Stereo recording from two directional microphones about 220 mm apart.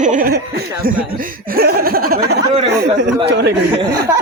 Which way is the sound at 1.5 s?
45° right (ahead or behind).